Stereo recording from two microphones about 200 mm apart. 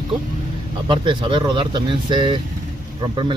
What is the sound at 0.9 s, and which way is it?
Speech, 25° right (ahead or behind).